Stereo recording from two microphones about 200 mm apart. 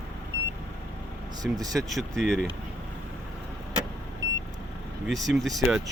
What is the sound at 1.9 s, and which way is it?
Speech, centre (ahead or behind).